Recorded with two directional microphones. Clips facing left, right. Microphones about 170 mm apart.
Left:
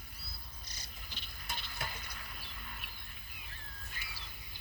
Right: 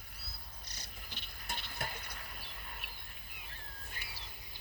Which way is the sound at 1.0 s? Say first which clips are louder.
Even; 60° right (ahead or behind).